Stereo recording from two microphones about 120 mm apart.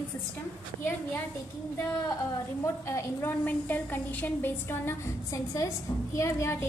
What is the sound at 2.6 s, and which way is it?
A woman's voice, 20° left (ahead or behind).